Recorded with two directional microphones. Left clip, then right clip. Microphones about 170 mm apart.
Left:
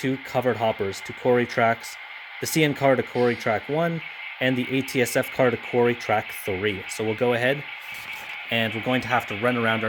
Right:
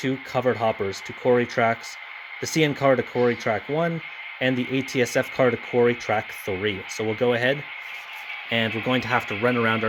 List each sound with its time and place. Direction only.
0.0 s speech: 10° left (ahead or behind)